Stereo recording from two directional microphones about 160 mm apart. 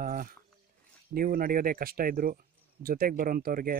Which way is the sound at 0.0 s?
55° right (ahead or behind).